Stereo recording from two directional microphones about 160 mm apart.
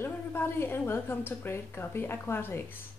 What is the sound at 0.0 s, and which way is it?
A woman's voice, 15° left (ahead or behind).